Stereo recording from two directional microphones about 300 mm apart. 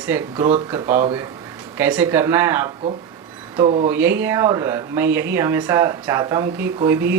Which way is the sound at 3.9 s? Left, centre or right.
Centre.